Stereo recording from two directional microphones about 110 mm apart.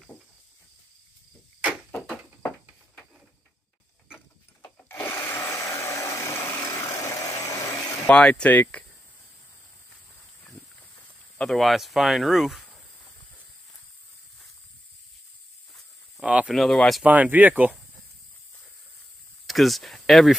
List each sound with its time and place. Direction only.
4.6 s wood: 20° left (ahead or behind)
5.0 s a sound: 20° left (ahead or behind)
8.1 s speech: 10° left (ahead or behind)
11.3 s speech: 5° left (ahead or behind)
15.7 s a sound: 10° right (ahead or behind)
16.5 s speech: centre (ahead or behind)
17.0 s speech: 15° right (ahead or behind)
19.4 s speech: centre (ahead or behind)